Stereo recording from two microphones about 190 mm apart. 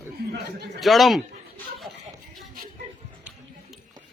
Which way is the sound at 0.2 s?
55° right (ahead or behind).